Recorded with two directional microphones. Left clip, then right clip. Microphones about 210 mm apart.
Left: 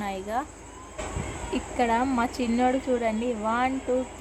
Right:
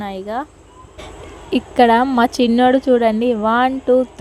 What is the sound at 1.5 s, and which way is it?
A woman's voice, 40° right (ahead or behind).